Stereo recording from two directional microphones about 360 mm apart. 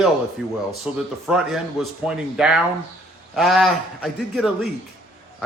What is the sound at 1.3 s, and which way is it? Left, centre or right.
Speech, centre.